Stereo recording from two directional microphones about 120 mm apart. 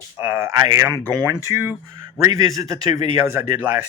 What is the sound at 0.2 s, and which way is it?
Speech, 15° right (ahead or behind).